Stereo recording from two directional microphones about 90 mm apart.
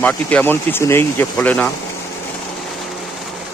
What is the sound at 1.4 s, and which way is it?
Speech, 15° left (ahead or behind).